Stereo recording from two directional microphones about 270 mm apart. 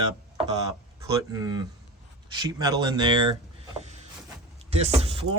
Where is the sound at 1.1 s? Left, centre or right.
Centre.